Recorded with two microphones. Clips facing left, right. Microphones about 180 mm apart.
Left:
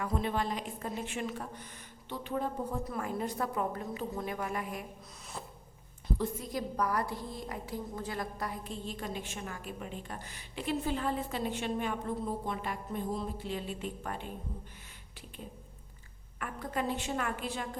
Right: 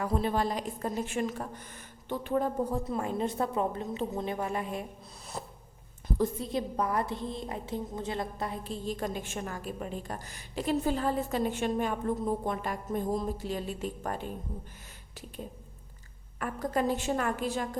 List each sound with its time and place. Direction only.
0.0 s a woman's voice: 35° right (ahead or behind)
2.8 s a woman's voice: 25° right (ahead or behind)
5.4 s a sound: 40° right (ahead or behind)
6.4 s a woman's voice: 25° right (ahead or behind); by 14.3 s 40° right (ahead or behind)
16.4 s a woman's voice: 40° right (ahead or behind)